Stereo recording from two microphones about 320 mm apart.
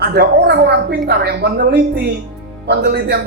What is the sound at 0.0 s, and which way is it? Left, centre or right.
A woman's voice, right.